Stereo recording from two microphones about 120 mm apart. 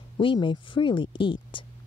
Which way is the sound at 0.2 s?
45° left (ahead or behind).